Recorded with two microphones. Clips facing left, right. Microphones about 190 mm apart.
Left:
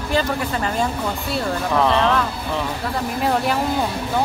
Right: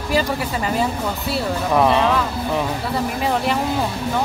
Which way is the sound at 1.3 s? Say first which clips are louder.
Right 2 dB; 10° right (ahead or behind).